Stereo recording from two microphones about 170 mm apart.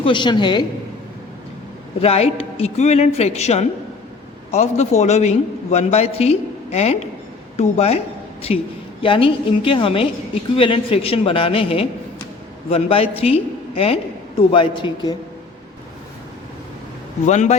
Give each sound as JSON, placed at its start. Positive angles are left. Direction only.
{"t": 0.0, "sound": "a woman's voice", "side_deg": 25}
{"t": 2.0, "sound": "a man's voice", "side_deg": 35}
{"t": 17.2, "sound": "speech", "side_deg": 45}